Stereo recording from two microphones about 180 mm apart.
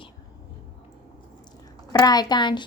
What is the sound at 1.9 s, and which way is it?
Speech, 20° left (ahead or behind).